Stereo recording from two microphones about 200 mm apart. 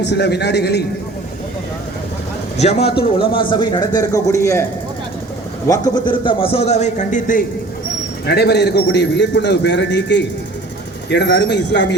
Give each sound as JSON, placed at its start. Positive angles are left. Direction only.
{"t": 0.0, "sound": "a man's voice", "side_deg": 60}
{"t": 2.6, "sound": "a man's voice", "side_deg": 30}
{"t": 5.6, "sound": "a man's voice", "side_deg": 20}
{"t": 8.3, "sound": "a man's voice", "side_deg": 55}